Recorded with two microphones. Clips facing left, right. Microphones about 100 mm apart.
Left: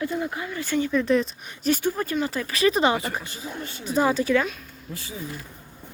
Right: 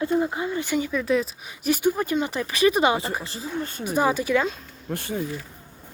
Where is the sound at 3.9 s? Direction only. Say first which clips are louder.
Left 1 dB; 15° right (ahead or behind).